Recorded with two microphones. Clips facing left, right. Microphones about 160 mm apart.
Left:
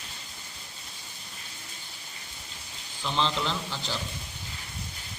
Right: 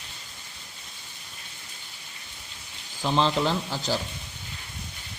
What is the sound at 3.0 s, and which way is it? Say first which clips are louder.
A man's voice: right 5 dB; 45° right (ahead or behind).